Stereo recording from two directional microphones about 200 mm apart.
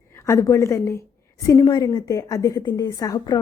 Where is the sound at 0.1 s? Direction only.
15° left (ahead or behind).